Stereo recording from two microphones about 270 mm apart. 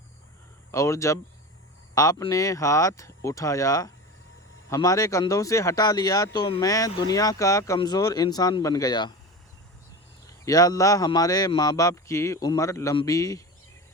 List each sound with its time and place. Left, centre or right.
0.7 s speech: centre
10.2 s speech: centre